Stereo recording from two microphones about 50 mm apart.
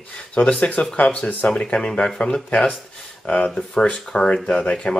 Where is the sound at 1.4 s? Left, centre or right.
Centre.